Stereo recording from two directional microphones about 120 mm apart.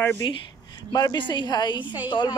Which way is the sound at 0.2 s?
40° left (ahead or behind).